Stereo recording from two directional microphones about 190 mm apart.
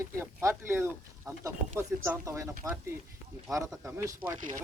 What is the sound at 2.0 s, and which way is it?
Speech, 15° right (ahead or behind).